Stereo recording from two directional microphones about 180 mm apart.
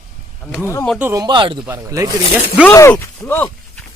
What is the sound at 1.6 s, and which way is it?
Speech, 15° right (ahead or behind).